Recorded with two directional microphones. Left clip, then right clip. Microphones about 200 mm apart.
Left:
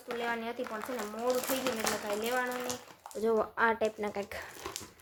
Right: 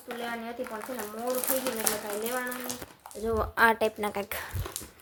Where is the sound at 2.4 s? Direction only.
15° left (ahead or behind).